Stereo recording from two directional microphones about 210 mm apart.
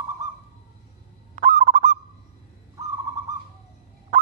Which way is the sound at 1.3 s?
35° right (ahead or behind).